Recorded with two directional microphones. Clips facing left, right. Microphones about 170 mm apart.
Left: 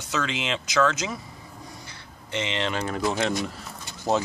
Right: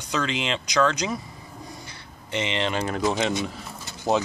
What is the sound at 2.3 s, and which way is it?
Speech, 15° right (ahead or behind).